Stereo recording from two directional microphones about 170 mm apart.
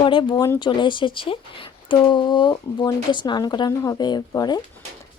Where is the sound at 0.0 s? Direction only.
30° left (ahead or behind).